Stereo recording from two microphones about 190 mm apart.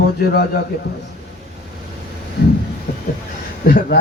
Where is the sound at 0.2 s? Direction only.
55° left (ahead or behind).